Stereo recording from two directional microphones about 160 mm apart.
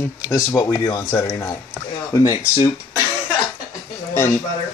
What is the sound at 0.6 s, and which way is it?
Speech, 25° left (ahead or behind).